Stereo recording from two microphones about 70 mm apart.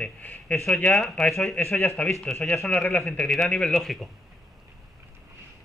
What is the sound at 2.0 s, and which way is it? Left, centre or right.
Speech, centre.